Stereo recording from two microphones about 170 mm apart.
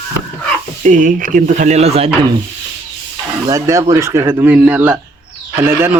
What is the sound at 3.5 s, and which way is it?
Speech, 20° right (ahead or behind).